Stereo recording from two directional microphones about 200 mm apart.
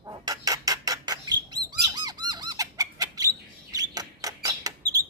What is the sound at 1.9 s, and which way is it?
Bird, 20° right (ahead or behind).